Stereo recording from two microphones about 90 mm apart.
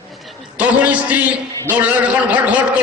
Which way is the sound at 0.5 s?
15° right (ahead or behind).